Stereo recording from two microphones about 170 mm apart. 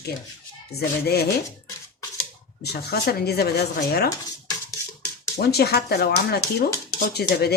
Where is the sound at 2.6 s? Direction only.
70° left (ahead or behind).